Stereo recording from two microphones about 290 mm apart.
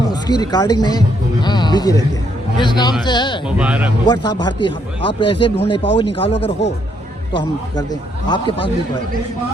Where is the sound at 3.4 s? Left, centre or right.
Centre.